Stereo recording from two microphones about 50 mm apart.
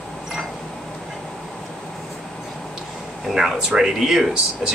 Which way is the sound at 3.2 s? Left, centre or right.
Centre.